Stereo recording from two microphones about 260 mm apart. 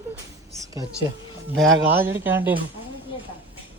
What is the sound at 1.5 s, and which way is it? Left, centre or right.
Speech, centre.